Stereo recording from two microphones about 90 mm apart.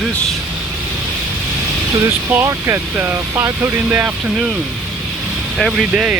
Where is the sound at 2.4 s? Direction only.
30° right (ahead or behind).